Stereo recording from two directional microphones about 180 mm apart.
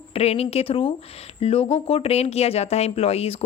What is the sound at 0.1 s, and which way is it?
Speech, 35° left (ahead or behind).